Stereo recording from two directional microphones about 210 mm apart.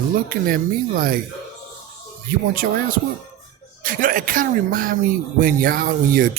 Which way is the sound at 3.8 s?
40° right (ahead or behind).